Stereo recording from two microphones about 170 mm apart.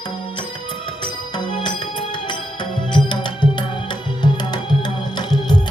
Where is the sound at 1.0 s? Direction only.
25° left (ahead or behind).